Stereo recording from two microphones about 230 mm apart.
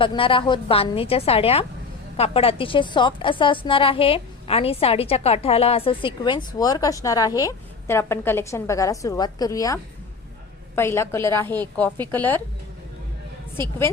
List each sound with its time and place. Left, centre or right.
0.0 s a woman's voice: left